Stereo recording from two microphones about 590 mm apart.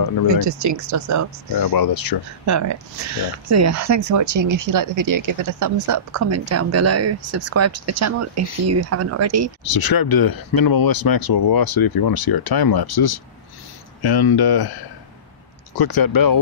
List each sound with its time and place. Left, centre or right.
0.4 s speech: right
1.6 s speech: left
2.4 s speech: right
9.7 s speech: left
15.8 s speech: left